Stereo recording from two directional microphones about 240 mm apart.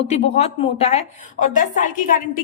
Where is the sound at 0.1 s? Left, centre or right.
Left.